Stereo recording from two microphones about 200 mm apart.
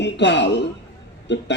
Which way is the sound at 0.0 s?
60° left (ahead or behind).